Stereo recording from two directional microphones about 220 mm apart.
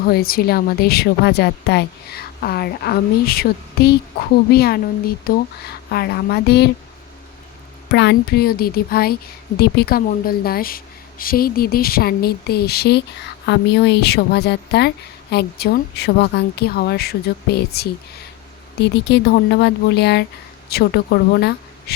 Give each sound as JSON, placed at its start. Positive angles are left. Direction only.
{"t": 0.0, "sound": "speech", "side_deg": 45}
{"t": 7.9, "sound": "speech", "side_deg": 50}